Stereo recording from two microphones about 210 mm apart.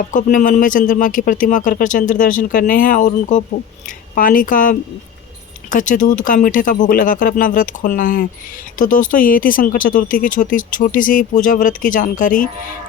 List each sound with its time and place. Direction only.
0.0 s speech: 40° left (ahead or behind)